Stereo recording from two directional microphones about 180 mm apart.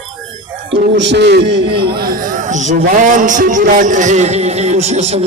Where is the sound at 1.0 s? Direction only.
75° right (ahead or behind).